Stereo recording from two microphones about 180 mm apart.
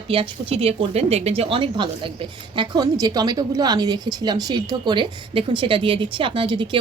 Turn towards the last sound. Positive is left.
turn(degrees=-30)  # may be behind; listen again after turning